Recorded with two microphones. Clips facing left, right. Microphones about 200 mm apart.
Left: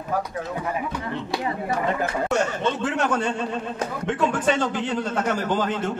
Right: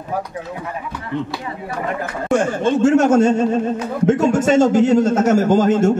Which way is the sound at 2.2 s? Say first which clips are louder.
Right 9 dB; 50° right (ahead or behind).